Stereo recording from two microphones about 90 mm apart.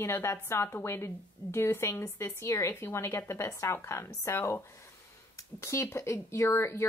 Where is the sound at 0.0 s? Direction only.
30° left (ahead or behind).